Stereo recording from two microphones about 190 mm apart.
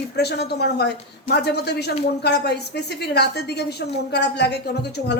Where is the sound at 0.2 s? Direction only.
60° left (ahead or behind).